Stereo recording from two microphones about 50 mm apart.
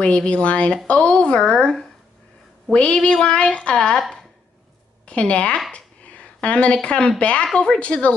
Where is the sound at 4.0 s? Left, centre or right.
Centre.